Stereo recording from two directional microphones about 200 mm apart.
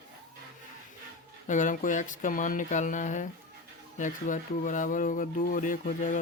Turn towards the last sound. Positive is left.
turn(degrees=40)  # may be behind; listen again after turning